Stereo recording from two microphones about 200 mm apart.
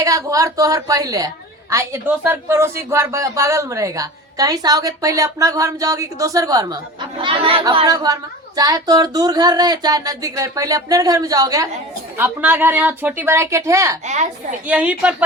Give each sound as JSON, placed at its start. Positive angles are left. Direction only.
{"t": 0.0, "sound": "speech", "side_deg": -15}